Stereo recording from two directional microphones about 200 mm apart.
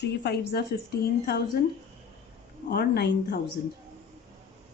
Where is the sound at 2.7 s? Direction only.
55° left (ahead or behind).